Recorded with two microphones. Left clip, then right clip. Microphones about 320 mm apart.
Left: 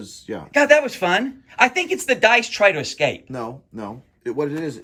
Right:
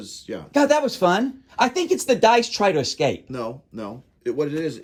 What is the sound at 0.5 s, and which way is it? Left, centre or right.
Speech, centre.